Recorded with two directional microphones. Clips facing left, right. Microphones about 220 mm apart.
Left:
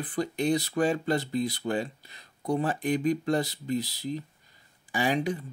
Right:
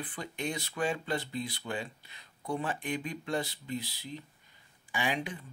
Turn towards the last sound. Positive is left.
turn(degrees=40)  # may be behind; listen again after turning